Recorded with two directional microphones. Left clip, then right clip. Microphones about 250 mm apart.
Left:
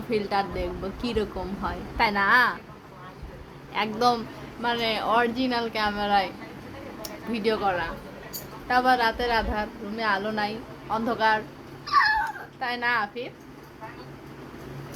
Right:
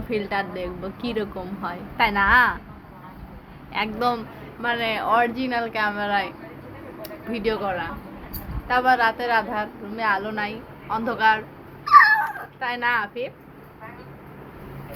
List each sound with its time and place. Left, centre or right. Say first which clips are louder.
0.1 s a woman's voice: even; centre
3.7 s a woman's voice: even; centre
11.9 s dog: right 8 dB; centre
12.5 s a woman's voice: right 2 dB; centre